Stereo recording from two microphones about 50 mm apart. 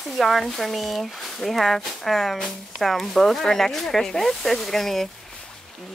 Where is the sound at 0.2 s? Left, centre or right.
Centre.